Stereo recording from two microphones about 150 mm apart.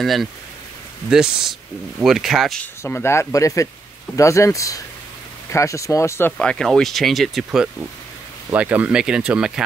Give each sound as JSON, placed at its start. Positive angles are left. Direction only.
{"t": 0.0, "sound": "speech", "side_deg": 0}
{"t": 2.6, "sound": "speech", "side_deg": 15}
{"t": 6.3, "sound": "speech", "side_deg": 5}